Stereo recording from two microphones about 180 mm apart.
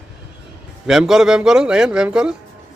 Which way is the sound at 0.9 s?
Centre (ahead or behind).